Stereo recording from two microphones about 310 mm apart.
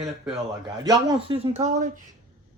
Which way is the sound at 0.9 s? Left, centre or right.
Centre.